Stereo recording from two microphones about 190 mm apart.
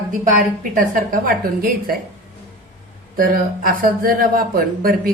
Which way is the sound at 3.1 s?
50° right (ahead or behind).